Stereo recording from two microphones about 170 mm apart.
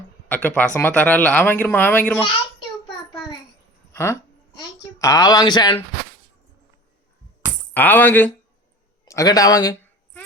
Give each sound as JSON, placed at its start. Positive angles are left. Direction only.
{"t": 0.3, "sound": "speech", "side_deg": 10}
{"t": 3.9, "sound": "speech", "side_deg": 15}
{"t": 7.7, "sound": "speech", "side_deg": 10}